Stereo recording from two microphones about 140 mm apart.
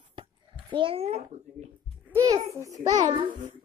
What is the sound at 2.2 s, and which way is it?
Speech, 25° right (ahead or behind).